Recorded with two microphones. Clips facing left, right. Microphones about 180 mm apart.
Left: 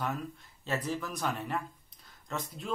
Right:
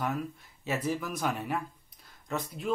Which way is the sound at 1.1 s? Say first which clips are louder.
Right 2 dB; centre (ahead or behind).